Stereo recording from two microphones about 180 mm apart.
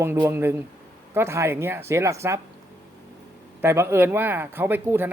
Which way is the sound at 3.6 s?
15° right (ahead or behind).